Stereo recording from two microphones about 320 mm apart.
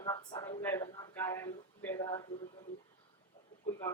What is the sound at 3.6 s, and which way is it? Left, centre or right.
Speech, centre.